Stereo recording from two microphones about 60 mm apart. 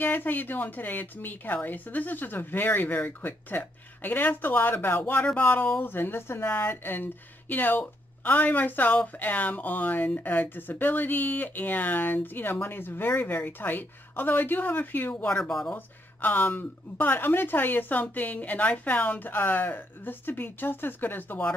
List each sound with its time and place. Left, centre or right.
0.0 s speech: left
15.2 s speech: centre
15.7 s speech: left